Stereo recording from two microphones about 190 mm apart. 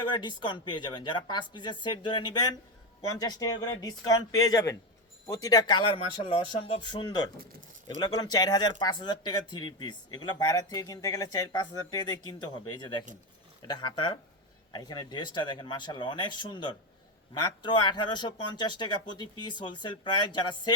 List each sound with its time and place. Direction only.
0.1 s speech: 25° left (ahead or behind)